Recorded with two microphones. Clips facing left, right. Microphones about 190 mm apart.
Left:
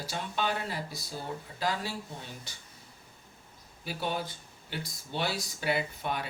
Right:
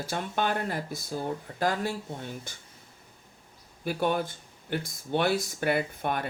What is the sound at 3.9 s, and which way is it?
Speech, 50° right (ahead or behind).